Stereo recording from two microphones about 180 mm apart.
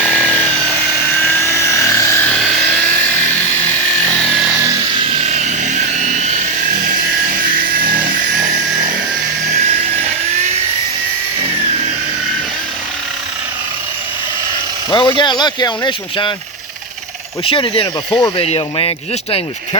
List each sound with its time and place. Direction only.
0.0 s helicopter: 5° left (ahead or behind)
4.9 s sawing: 40° right (ahead or behind)
14.8 s vehicle: 25° left (ahead or behind)
15.2 s speech: 25° left (ahead or behind)
17.4 s speech: 30° left (ahead or behind)